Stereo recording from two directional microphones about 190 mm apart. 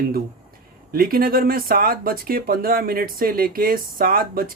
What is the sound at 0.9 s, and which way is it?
Speech, 50° right (ahead or behind).